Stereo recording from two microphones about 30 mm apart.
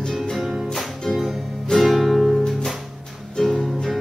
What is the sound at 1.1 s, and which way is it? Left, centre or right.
Music, centre.